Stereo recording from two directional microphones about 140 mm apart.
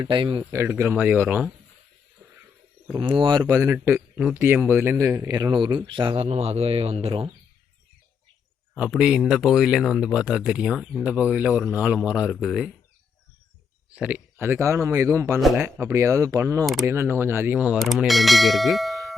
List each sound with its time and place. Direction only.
0.0 s a man's voice: 35° right (ahead or behind)
0.5 s speech: 15° right (ahead or behind)
3.0 s a man's voice: 40° right (ahead or behind)
3.5 s a man's voice: 20° right (ahead or behind); by 7.3 s 45° right (ahead or behind)
8.7 s speech: 5° right (ahead or behind)
13.9 s speech: 10° right (ahead or behind)
15.4 s speech: centre (ahead or behind)
15.6 s speech: 20° right (ahead or behind); by 19.1 s centre (ahead or behind)